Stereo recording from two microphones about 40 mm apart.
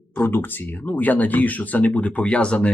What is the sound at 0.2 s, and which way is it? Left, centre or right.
Speech, left.